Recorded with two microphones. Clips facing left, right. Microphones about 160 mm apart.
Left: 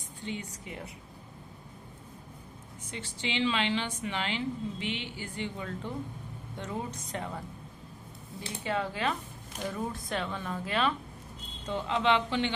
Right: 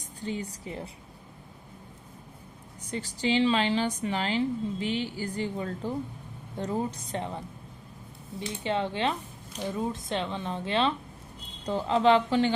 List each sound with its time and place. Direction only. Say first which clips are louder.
0.0 s a woman's voice: right 4 dB; 40° right (ahead or behind)
2.9 s a woman's voice: right 8 dB; 40° right (ahead or behind)
11.6 s a woman's voice: right 6 dB; 35° right (ahead or behind)